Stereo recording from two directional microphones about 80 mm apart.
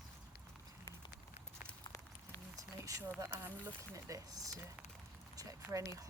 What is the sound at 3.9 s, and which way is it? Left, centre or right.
Speech, right.